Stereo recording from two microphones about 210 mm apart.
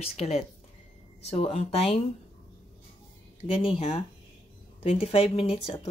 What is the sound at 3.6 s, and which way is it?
Speech, 30° left (ahead or behind).